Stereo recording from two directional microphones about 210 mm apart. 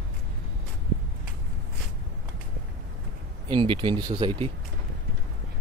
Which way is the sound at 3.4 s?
25° right (ahead or behind).